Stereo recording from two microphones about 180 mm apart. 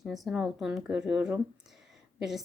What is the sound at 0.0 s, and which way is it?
Speech, centre (ahead or behind).